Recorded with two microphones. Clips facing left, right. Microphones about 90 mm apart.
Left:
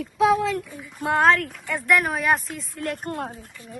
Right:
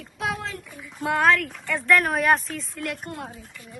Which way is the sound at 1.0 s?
25° left (ahead or behind).